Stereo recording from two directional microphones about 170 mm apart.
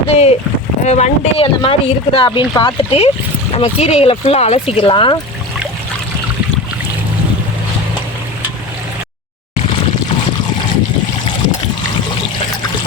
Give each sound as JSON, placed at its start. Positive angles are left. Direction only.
{"t": 0.1, "sound": "speech", "side_deg": 40}